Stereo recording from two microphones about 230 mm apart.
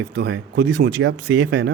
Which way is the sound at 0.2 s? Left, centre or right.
Right.